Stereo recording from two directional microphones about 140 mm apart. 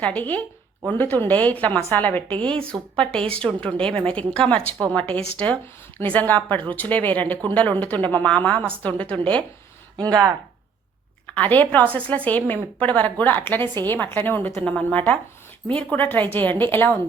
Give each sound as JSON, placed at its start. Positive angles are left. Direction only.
{"t": 0.0, "sound": "speech", "side_deg": 10}
{"t": 10.0, "sound": "speech", "side_deg": -30}
{"t": 11.3, "sound": "speech", "side_deg": 10}